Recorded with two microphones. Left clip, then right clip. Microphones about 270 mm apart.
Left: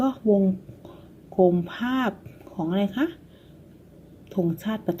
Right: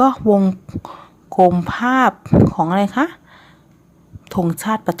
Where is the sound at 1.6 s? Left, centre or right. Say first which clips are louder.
Right 12 dB; right.